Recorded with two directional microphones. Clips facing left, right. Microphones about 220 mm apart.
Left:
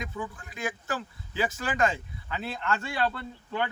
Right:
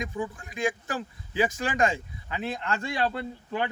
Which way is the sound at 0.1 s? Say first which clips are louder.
Right 5 dB; 20° right (ahead or behind).